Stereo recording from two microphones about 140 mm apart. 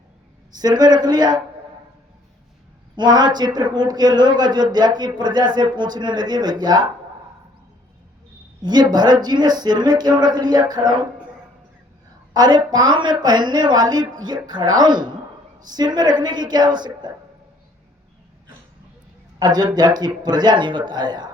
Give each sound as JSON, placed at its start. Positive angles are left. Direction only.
{"t": 0.5, "sound": "a man's voice", "side_deg": -30}
{"t": 2.9, "sound": "a man's voice", "side_deg": -30}
{"t": 8.6, "sound": "a man's voice", "side_deg": -30}
{"t": 12.3, "sound": "a woman's voice", "side_deg": -30}
{"t": 19.4, "sound": "a man's voice", "side_deg": -30}